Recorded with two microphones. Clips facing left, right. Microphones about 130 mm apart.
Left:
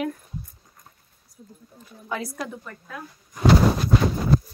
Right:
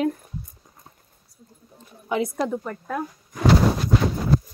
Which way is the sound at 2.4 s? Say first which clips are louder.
Right 8 dB; 40° right (ahead or behind).